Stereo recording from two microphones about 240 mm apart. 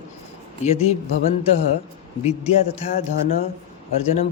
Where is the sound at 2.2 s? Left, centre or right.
Left.